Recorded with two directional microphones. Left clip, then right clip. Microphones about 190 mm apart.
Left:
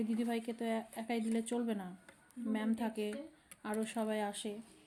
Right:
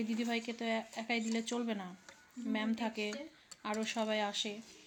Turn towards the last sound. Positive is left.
turn(degrees=10)  # may be behind; listen again after turning